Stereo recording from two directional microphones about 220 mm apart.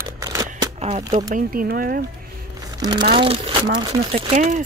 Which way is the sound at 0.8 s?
30° right (ahead or behind).